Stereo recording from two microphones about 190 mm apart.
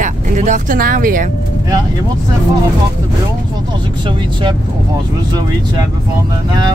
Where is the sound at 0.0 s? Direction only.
40° right (ahead or behind).